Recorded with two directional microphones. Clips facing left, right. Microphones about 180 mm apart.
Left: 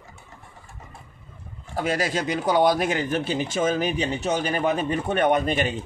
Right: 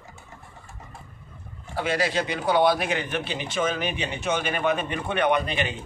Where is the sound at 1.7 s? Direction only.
40° left (ahead or behind).